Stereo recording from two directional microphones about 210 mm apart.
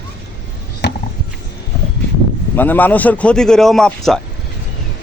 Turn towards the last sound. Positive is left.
turn(degrees=0)  # may be behind; listen again after turning